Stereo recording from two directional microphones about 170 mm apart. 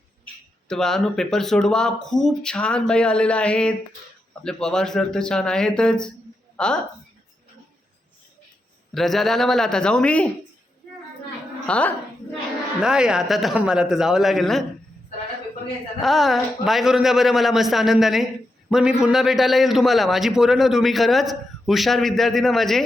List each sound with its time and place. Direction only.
0.7 s a man's voice: 5° left (ahead or behind)
9.0 s a man's voice: centre (ahead or behind)
11.6 s speech: 10° left (ahead or behind)
12.8 s a man's voice: 5° right (ahead or behind)
16.0 s a man's voice: centre (ahead or behind)